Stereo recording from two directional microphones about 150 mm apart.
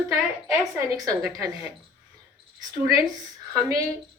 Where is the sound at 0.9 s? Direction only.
25° right (ahead or behind).